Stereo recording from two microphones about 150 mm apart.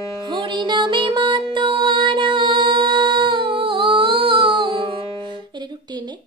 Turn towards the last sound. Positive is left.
turn(degrees=-35)  # may be behind; listen again after turning